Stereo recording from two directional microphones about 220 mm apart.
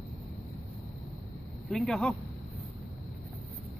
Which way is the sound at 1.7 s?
5° left (ahead or behind).